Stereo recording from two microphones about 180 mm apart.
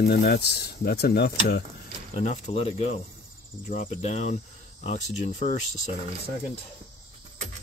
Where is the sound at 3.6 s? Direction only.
45° left (ahead or behind).